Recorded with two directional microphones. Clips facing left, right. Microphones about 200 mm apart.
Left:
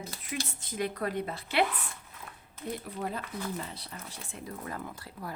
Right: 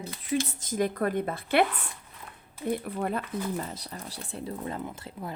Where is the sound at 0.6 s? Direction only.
45° right (ahead or behind).